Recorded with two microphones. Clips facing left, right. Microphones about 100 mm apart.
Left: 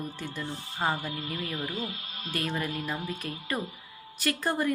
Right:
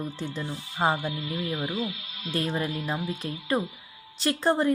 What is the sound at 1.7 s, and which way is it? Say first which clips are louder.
Speech: right 4 dB; 45° left (ahead or behind).